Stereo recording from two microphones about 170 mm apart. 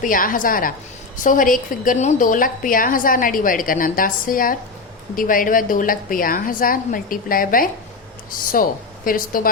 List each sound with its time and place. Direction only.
0.0 s a woman's voice: 55° left (ahead or behind)